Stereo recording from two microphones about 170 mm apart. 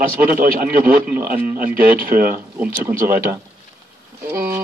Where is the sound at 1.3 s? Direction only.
10° right (ahead or behind).